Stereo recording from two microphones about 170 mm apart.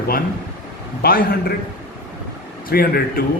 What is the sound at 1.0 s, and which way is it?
Speech, 60° left (ahead or behind).